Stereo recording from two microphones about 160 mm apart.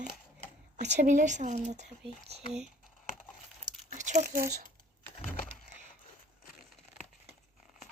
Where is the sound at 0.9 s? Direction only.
50° right (ahead or behind).